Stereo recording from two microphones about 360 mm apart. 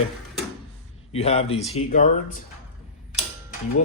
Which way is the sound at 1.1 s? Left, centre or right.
Centre.